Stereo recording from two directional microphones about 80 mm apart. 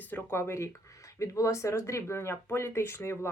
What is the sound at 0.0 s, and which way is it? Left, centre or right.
Speech, left.